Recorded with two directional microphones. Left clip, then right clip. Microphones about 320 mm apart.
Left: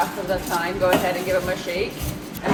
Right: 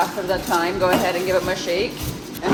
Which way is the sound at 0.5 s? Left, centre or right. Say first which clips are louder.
Right 2 dB; right.